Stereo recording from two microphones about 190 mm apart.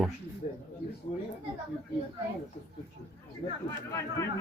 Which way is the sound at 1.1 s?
35° left (ahead or behind).